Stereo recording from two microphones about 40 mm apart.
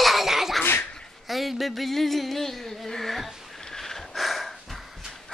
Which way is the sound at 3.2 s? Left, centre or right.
Centre.